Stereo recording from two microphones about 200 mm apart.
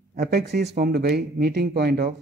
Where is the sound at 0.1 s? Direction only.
50° right (ahead or behind).